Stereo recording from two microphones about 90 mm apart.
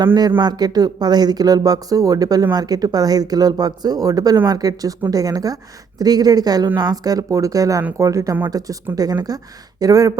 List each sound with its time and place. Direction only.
0.0 s speech: 55° right (ahead or behind)